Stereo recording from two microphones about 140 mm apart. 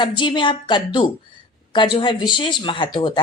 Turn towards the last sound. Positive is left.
turn(degrees=35)  # may be behind; listen again after turning